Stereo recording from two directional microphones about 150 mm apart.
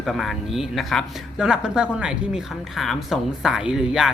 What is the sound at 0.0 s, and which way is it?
Speech, centre (ahead or behind).